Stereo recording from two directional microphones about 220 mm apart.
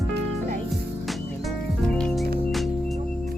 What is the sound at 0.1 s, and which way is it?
Music, 45° right (ahead or behind).